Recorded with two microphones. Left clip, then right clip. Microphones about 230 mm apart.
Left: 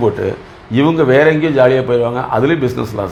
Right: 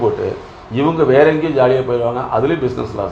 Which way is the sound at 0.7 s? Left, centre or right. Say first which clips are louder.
Left 2 dB; left.